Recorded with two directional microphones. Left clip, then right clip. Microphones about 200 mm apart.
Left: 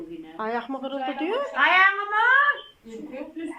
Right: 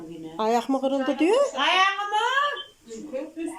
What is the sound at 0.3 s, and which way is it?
A woman's voice, 20° right (ahead or behind).